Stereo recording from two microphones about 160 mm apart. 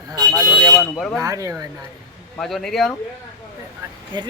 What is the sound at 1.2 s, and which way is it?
Speech, 20° right (ahead or behind).